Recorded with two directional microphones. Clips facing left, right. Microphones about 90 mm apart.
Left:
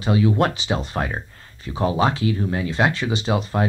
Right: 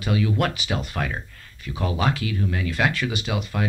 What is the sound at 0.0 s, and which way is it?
Speech, 30° left (ahead or behind).